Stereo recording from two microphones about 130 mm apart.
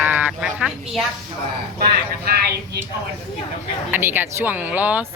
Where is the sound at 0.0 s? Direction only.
15° right (ahead or behind).